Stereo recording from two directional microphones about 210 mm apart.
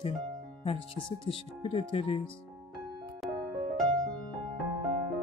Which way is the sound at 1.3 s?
25° left (ahead or behind).